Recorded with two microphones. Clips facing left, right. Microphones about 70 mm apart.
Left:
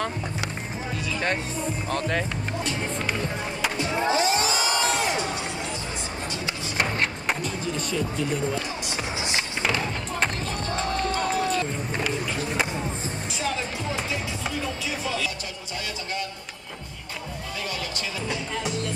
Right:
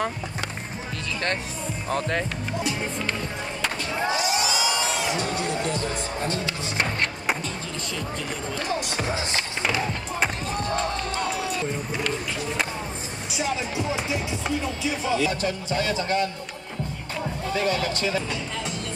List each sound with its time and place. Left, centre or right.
1.9 s speech: centre
3.8 s skateboard: left
4.2 s crowd: left
5.2 s music: right
6.8 s a sound: centre
8.5 s speech: right
9.6 s speech: centre
13.4 s speech: centre
15.4 s speech: right
17.6 s speech: right